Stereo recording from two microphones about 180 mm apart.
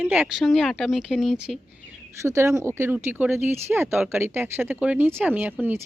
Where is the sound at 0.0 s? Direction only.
5° right (ahead or behind).